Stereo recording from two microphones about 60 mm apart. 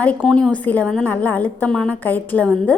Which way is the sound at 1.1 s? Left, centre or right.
Left.